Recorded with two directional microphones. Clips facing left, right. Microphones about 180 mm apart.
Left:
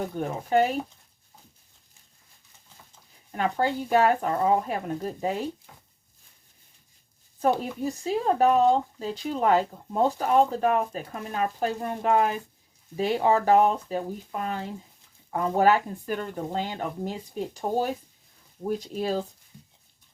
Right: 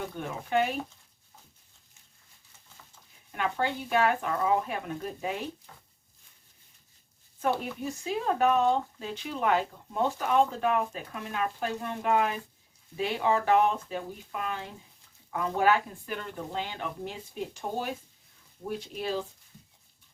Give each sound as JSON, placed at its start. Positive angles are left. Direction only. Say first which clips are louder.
{"t": 0.2, "sound": "speech", "louder": "left 5 dB", "side_deg": 40}
{"t": 3.3, "sound": "speech", "louder": "left 4 dB", "side_deg": 40}
{"t": 7.6, "sound": "speech", "louder": "left 5 dB", "side_deg": 35}